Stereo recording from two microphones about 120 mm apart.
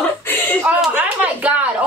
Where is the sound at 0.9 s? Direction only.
10° right (ahead or behind).